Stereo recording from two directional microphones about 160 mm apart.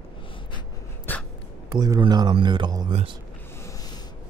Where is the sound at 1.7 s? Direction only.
25° right (ahead or behind).